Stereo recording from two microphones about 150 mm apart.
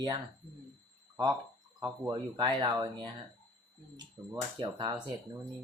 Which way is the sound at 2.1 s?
30° right (ahead or behind).